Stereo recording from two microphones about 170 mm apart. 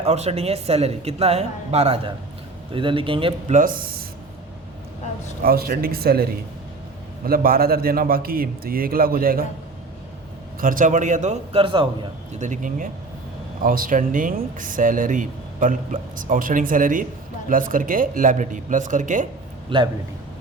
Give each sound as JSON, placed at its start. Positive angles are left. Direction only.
{"t": 0.0, "sound": "speech", "side_deg": -40}
{"t": 3.5, "sound": "a man's voice", "side_deg": -55}
{"t": 5.4, "sound": "a man's voice", "side_deg": -60}
{"t": 7.3, "sound": "a man's voice", "side_deg": -60}
{"t": 10.6, "sound": "speech", "side_deg": -55}
{"t": 12.3, "sound": "speech", "side_deg": -45}
{"t": 19.7, "sound": "speech", "side_deg": -30}